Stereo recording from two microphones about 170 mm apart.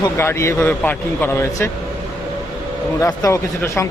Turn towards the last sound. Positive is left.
turn(degrees=15)  # may be behind; listen again after turning